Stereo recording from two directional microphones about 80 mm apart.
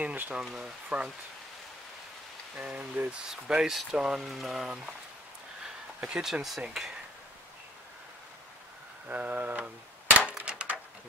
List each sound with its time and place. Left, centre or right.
0.0 s a sound: centre
0.4 s speech: centre
2.5 s speech: centre
5.9 s speech: centre
9.0 s speech: centre
10.3 s a sound: centre